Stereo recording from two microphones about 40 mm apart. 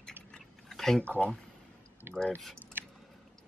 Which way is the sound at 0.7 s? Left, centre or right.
Centre.